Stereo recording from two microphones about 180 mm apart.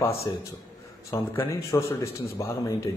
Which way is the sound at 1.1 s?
15° left (ahead or behind).